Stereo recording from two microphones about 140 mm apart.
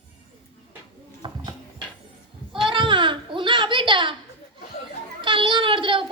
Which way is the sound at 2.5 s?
35° right (ahead or behind).